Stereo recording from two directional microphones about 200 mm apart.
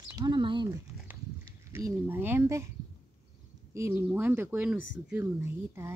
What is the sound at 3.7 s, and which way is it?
Speech, 10° right (ahead or behind).